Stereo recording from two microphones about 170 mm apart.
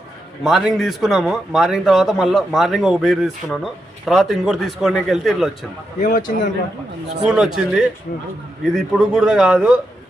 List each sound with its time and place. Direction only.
0.4 s a man's voice: centre (ahead or behind)
6.0 s a man's voice: 50° left (ahead or behind)
7.3 s a man's voice: 5° right (ahead or behind)